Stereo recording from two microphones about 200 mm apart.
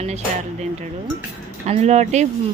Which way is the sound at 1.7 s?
35° right (ahead or behind).